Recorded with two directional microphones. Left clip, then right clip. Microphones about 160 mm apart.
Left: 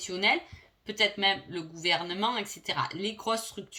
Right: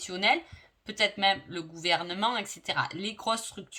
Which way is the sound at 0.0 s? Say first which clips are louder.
Right 1 dB; 45° right (ahead or behind).